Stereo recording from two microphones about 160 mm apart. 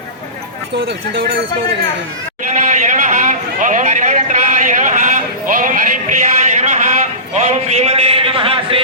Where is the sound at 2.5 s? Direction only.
50° right (ahead or behind).